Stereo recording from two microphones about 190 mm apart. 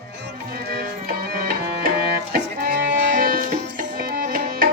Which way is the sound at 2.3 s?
60° right (ahead or behind).